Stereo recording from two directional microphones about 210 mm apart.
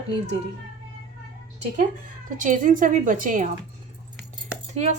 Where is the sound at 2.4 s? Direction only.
40° right (ahead or behind).